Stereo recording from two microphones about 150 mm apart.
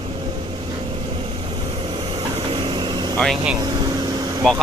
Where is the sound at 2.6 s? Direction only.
30° right (ahead or behind).